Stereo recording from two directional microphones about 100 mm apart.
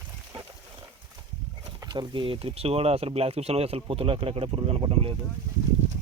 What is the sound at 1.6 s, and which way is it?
Speech, 45° right (ahead or behind).